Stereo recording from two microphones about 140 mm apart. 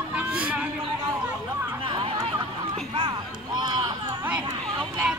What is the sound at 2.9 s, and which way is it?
Speech, 35° right (ahead or behind).